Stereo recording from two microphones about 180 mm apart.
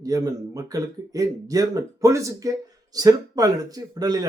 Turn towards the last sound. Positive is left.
turn(degrees=-20)  # may be behind; listen again after turning